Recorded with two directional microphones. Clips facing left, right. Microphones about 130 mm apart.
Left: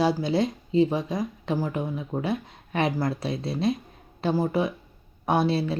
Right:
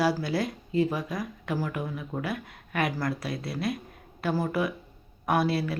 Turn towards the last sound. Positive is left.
turn(degrees=25)  # may be behind; listen again after turning